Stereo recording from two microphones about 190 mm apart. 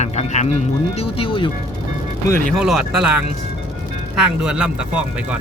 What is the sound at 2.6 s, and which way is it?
Speech, centre (ahead or behind).